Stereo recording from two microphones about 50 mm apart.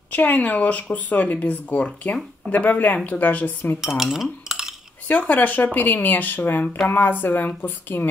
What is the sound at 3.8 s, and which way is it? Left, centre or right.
Cutlery, centre.